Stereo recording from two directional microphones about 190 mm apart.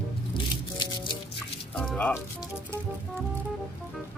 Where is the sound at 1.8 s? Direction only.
5° left (ahead or behind).